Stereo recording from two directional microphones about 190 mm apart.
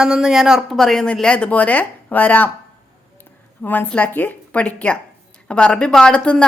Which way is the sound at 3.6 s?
10° left (ahead or behind).